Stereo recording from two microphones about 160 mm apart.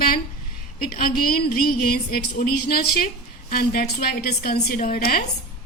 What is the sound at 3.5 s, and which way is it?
A woman's voice, 65° left (ahead or behind).